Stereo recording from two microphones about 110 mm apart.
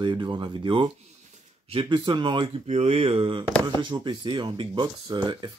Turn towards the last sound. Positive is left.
turn(degrees=-40)  # may be behind; listen again after turning